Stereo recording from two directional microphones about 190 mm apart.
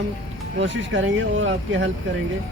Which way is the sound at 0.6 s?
75° right (ahead or behind).